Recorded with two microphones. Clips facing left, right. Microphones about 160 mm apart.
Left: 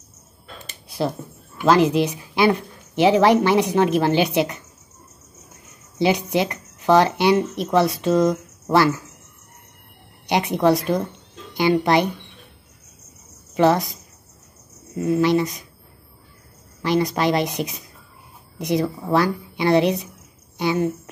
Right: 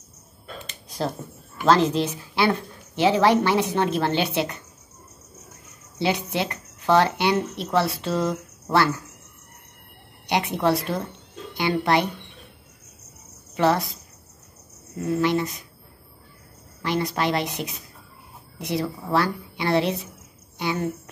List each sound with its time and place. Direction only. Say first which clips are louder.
0.7 s a sound: left 4 dB; 10° left (ahead or behind)
1.6 s a woman's voice: left 3 dB; 10° left (ahead or behind)
5.9 s a woman's voice: left 5 dB; 20° left (ahead or behind)
10.2 s a woman's voice: left 4 dB; 20° left (ahead or behind)
13.6 s a woman's voice: left 4 dB; 20° left (ahead or behind)
15.0 s a woman's voice: left 4 dB; 15° left (ahead or behind)
16.8 s a woman's voice: left 5 dB; 20° left (ahead or behind)